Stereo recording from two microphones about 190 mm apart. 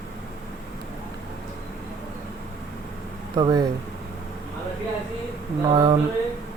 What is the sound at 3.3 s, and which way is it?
Speech, 20° right (ahead or behind).